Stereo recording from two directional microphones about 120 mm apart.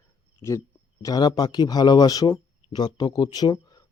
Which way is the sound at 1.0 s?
35° left (ahead or behind).